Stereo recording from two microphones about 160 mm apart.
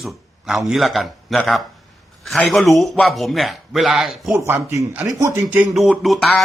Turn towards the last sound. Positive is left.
turn(degrees=5)  # may be behind; listen again after turning